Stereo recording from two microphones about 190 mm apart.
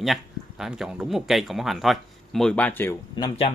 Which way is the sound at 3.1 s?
20° left (ahead or behind).